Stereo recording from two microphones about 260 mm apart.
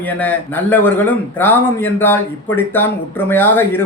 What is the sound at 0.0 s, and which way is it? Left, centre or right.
A man's voice, centre.